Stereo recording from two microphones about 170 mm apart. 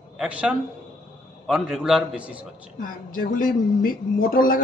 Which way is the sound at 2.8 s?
55° left (ahead or behind).